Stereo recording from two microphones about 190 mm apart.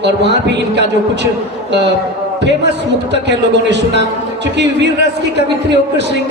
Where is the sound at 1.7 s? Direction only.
65° right (ahead or behind).